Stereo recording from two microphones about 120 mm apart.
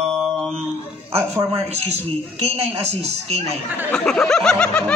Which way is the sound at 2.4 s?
60° right (ahead or behind).